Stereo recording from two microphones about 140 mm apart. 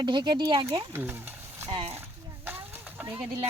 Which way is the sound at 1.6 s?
40° right (ahead or behind).